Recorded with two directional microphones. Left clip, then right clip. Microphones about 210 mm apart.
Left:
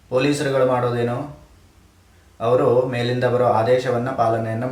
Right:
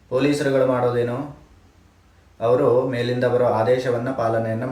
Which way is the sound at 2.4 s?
10° left (ahead or behind).